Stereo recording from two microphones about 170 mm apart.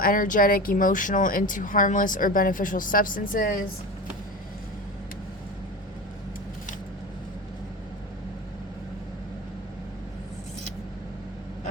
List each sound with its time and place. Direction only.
0.0 s speech: 55° left (ahead or behind)